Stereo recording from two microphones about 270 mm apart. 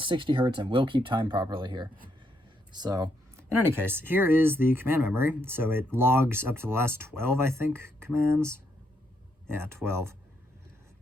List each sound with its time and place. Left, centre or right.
0.0 s speech: centre